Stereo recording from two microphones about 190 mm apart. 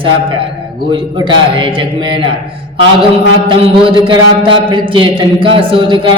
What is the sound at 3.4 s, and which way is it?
A man's voice, 25° right (ahead or behind).